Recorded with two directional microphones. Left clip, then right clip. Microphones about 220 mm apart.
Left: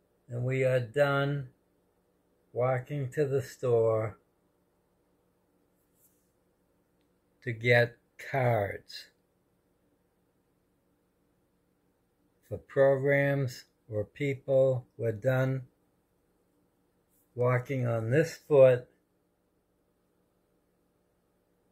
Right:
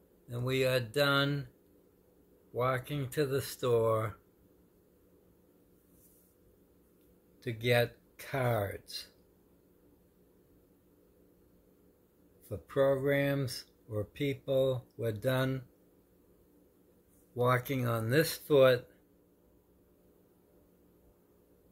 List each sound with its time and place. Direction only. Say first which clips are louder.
0.3 s speech: left 2 dB; 20° right (ahead or behind)
2.5 s speech: left 3 dB; 10° right (ahead or behind)
7.3 s speech: left 5 dB; 5° left (ahead or behind)
12.4 s speech: left 4 dB; 5° left (ahead or behind)
17.4 s speech: left 1 dB; 5° right (ahead or behind)